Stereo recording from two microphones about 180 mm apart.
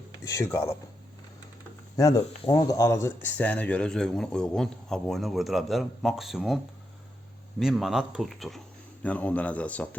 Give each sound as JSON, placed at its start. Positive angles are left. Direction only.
{"t": 0.3, "sound": "a man's voice", "side_deg": 15}
{"t": 2.0, "sound": "speech", "side_deg": 20}
{"t": 7.6, "sound": "a man's voice", "side_deg": 0}